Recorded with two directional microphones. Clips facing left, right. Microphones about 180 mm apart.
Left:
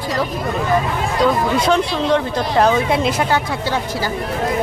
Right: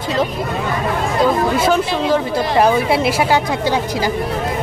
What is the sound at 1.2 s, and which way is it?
Speech, 5° right (ahead or behind).